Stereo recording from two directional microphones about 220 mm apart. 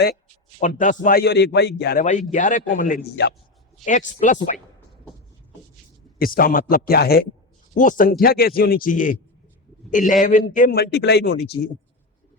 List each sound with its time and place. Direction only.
0.6 s a man's voice: 35° left (ahead or behind)
3.8 s a man's voice: centre (ahead or behind)
4.2 s a man's voice: 35° left (ahead or behind)
6.1 s a man's voice: 40° left (ahead or behind)